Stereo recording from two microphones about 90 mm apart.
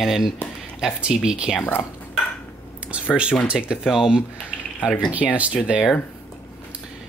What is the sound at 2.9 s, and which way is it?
Speech, 15° right (ahead or behind).